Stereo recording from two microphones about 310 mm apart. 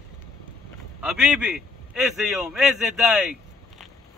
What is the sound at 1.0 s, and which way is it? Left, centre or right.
A man's voice, centre.